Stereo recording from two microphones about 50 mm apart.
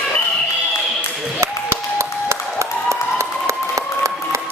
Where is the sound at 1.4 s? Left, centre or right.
Right.